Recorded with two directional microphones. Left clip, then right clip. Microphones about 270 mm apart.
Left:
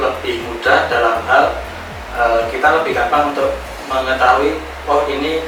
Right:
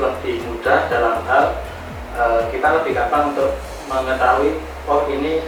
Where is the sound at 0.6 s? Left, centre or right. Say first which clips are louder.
Left 3 dB; centre.